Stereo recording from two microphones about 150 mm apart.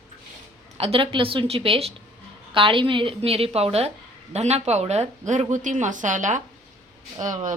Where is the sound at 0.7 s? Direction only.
40° right (ahead or behind).